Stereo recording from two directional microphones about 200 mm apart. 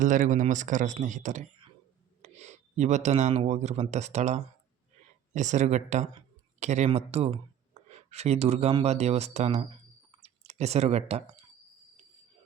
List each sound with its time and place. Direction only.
0.0 s speech: 40° right (ahead or behind)
10.1 s clicking: 30° right (ahead or behind)